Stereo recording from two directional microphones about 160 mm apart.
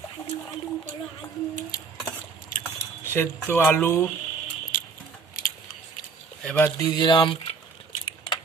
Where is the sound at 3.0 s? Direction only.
15° left (ahead or behind).